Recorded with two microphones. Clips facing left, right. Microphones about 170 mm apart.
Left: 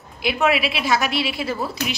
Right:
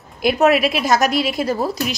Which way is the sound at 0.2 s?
45° right (ahead or behind).